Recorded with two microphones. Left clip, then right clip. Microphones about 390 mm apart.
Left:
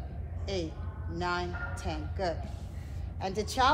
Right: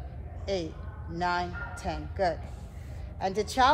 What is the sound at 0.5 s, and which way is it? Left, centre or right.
Speech, centre.